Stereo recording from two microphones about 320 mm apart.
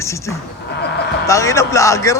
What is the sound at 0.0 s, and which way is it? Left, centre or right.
A man's voice, centre.